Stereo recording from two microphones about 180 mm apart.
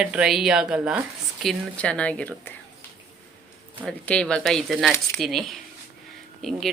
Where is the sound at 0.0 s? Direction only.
5° right (ahead or behind).